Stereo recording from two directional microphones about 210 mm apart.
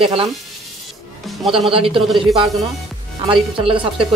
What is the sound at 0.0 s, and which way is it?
Speech, 25° right (ahead or behind).